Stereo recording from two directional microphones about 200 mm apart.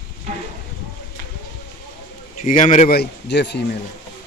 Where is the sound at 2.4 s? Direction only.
40° left (ahead or behind); by 3.8 s 60° left (ahead or behind).